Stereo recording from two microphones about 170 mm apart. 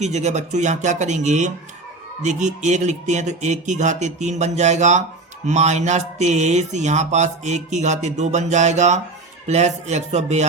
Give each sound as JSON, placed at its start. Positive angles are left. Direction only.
{"t": 0.0, "sound": "mantra", "side_deg": -40}
{"t": 9.5, "sound": "speech", "side_deg": -40}